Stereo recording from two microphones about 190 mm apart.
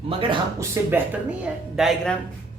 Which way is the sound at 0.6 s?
10° right (ahead or behind).